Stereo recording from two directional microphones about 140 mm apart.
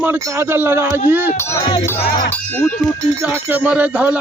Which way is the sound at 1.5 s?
35° left (ahead or behind).